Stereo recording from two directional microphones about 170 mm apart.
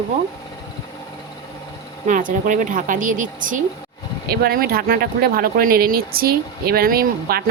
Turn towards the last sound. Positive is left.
turn(degrees=-60)  # may be behind; listen again after turning